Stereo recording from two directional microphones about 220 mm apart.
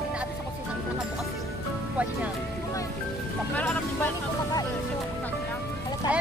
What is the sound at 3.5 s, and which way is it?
Music, 10° left (ahead or behind).